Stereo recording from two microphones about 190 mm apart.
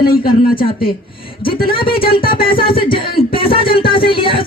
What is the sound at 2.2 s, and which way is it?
Speech, 50° left (ahead or behind).